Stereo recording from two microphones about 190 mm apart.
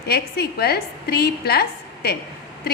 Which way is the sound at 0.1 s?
55° left (ahead or behind).